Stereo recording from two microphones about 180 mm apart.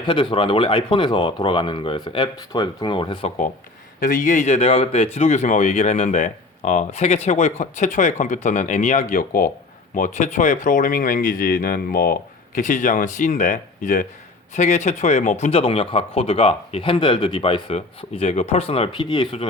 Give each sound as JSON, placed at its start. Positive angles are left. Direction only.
{"t": 0.0, "sound": "speech", "side_deg": 25}
{"t": 4.0, "sound": "speech", "side_deg": 45}